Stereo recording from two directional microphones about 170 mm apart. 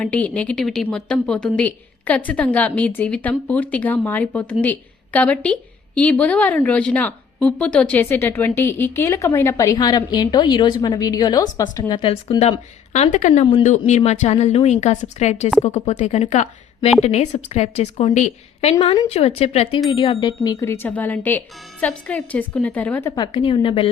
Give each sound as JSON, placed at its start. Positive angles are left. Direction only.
{"t": 0.0, "sound": "a woman's voice", "side_deg": 5}
{"t": 12.4, "sound": "a woman's voice", "side_deg": 40}
{"t": 23.2, "sound": "a woman's voice", "side_deg": 30}